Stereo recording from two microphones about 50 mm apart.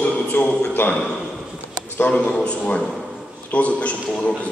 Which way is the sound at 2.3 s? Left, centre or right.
Left.